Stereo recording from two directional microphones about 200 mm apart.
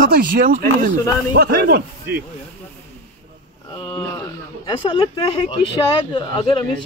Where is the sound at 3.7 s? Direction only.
20° left (ahead or behind).